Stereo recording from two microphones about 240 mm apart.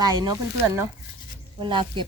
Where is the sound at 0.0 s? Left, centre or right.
Centre.